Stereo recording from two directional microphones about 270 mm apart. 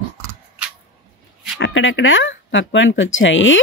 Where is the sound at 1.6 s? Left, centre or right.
Left.